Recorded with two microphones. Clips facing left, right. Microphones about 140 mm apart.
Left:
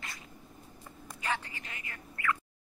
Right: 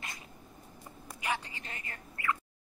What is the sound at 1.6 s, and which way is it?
Telephone, 35° right (ahead or behind).